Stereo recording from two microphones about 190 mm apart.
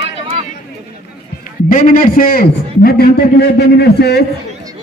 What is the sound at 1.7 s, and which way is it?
A man's voice, 45° left (ahead or behind).